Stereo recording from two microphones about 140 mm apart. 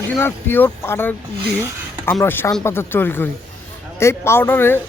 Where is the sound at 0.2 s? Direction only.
15° left (ahead or behind).